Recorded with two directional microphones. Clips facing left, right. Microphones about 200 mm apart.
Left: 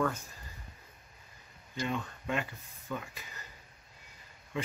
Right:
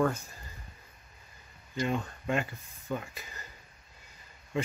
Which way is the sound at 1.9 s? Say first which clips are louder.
Right 3 dB; 40° right (ahead or behind).